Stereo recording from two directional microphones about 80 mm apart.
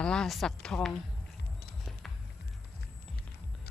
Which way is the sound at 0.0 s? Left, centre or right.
Centre.